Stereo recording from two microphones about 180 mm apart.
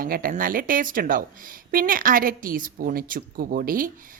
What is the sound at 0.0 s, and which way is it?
Speech, 50° right (ahead or behind).